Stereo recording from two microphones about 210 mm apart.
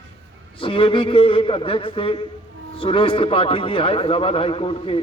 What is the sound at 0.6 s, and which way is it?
A man's voice, 25° left (ahead or behind).